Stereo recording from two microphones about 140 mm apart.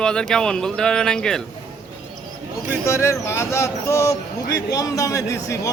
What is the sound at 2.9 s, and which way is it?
Speech, 20° left (ahead or behind).